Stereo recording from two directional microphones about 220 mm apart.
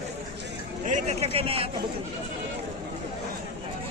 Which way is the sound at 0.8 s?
30° right (ahead or behind).